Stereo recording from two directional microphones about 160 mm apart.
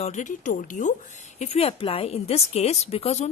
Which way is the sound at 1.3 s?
40° left (ahead or behind).